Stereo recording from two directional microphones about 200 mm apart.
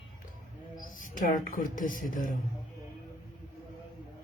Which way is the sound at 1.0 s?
45° left (ahead or behind).